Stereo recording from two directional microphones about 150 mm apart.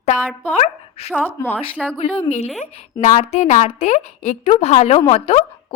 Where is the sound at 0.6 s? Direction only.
45° left (ahead or behind).